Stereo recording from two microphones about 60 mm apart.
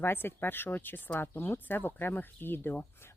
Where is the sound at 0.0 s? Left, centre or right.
Left.